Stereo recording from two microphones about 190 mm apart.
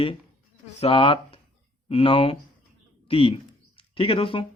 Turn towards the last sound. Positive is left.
turn(degrees=25)  # may be behind; listen again after turning